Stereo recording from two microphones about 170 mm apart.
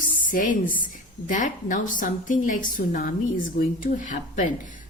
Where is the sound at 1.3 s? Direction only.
50° left (ahead or behind).